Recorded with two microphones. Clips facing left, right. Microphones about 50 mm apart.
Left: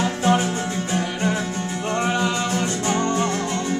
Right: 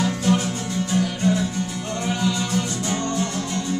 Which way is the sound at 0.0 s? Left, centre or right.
Left.